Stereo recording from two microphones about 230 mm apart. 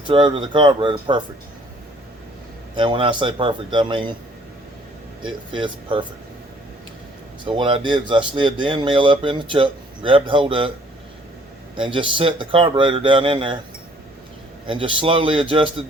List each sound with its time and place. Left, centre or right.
0.0 s speech: right
2.7 s speech: right
5.5 s speech: right
7.4 s speech: right
11.8 s speech: right
14.7 s speech: right